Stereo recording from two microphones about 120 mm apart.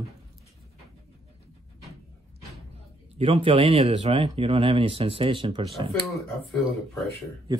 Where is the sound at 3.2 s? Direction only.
55° right (ahead or behind).